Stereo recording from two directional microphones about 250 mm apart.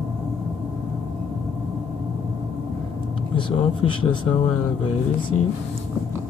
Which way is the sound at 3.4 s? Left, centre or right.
Centre.